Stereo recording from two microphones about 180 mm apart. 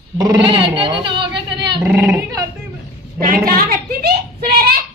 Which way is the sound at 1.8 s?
5° right (ahead or behind).